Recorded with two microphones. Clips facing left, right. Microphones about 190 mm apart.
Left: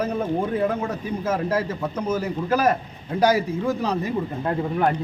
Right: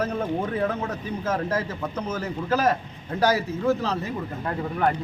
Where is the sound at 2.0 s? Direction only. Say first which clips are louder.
Left 4 dB; 10° left (ahead or behind).